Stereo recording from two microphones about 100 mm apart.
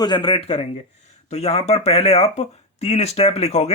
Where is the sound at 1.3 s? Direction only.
90° left.